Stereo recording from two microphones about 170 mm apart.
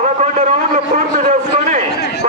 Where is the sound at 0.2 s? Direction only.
45° right (ahead or behind).